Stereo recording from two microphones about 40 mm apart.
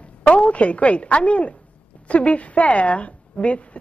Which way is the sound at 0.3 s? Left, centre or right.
Left.